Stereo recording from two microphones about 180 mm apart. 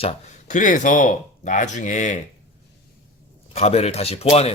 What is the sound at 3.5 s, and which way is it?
Speech, 35° left (ahead or behind).